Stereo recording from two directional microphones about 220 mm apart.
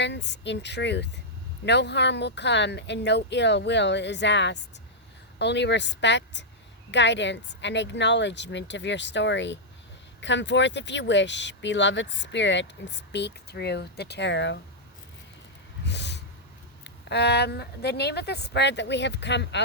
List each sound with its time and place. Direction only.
0.0 s speech: 50° left (ahead or behind)
15.9 s a sound: 50° left (ahead or behind)
16.8 s speech: 50° left (ahead or behind)